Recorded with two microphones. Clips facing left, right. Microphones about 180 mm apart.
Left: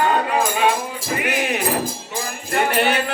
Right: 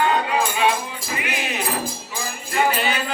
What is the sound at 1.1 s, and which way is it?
Music, 50° left (ahead or behind).